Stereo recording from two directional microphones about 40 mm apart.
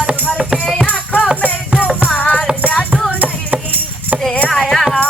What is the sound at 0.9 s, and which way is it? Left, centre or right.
Music, left.